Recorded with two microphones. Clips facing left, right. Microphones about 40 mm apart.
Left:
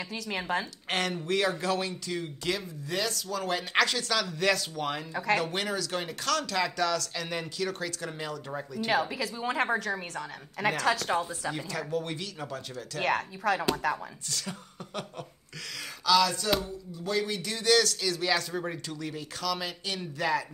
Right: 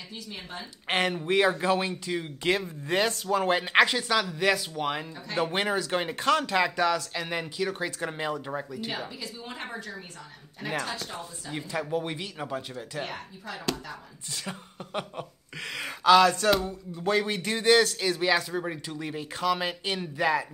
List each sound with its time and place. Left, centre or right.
0.1 s a woman's voice: left
0.8 s speech: right
2.5 s speech: right; by 5.0 s centre
5.1 s speech: left
5.4 s speech: right
9.2 s a woman's voice: left
11.5 s speech: right
13.0 s speech: left
15.8 s a man's voice: right
18.5 s speech: centre
18.9 s speech: right